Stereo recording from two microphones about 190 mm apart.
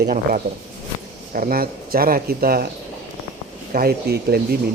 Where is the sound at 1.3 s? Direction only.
50° right (ahead or behind).